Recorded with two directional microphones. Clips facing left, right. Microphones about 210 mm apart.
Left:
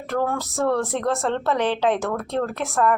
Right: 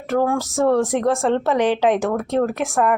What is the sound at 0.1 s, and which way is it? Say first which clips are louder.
A woman's voice: right 5 dB; 15° right (ahead or behind).